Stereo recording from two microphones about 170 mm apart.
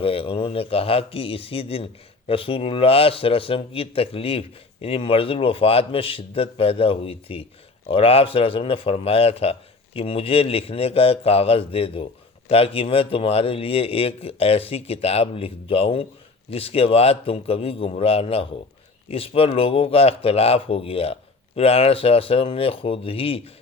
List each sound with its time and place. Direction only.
0.0 s speech: 30° left (ahead or behind)